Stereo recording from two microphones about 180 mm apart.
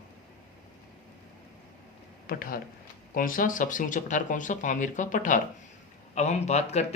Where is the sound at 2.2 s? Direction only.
55° left (ahead or behind).